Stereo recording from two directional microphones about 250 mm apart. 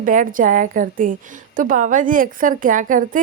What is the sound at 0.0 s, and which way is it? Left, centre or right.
A woman's voice, right.